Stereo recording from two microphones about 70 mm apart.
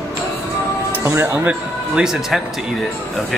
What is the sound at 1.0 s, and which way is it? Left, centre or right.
Speech, right.